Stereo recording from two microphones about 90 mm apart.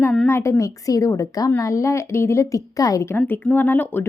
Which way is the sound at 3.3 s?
20° left (ahead or behind).